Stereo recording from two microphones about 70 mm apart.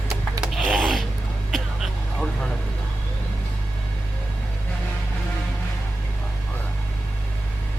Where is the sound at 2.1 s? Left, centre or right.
Centre.